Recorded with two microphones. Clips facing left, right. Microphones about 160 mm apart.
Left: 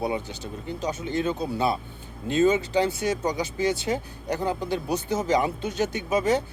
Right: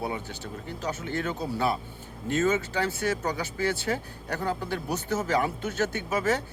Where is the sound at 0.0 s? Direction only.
15° left (ahead or behind).